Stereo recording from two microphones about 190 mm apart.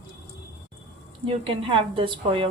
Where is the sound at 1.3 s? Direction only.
25° right (ahead or behind).